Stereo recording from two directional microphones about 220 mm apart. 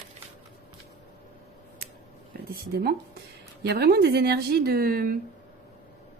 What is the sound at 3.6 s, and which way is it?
Speech, 45° right (ahead or behind).